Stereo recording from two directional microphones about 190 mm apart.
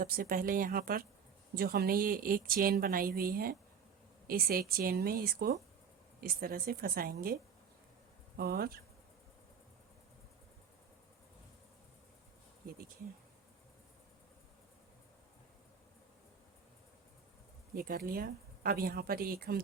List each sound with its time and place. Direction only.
0.0 s speech: 50° right (ahead or behind)
8.4 s speech: 55° right (ahead or behind)
17.7 s speech: 50° right (ahead or behind)